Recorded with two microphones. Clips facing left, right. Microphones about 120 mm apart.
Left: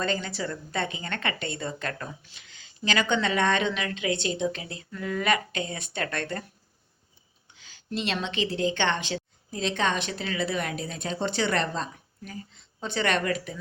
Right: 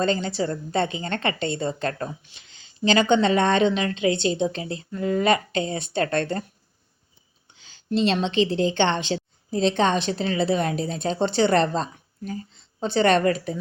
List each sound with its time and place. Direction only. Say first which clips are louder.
0.0 s speech: right 6 dB; 25° right (ahead or behind)
7.5 s a woman's voice: right 8 dB; 30° right (ahead or behind)